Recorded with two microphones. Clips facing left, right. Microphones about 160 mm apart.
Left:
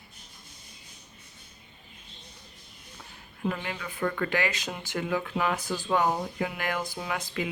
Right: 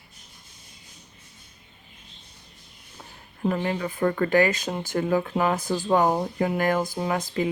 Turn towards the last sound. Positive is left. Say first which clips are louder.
# right 7 dB
turn(degrees=-35)  # may be behind; listen again after turning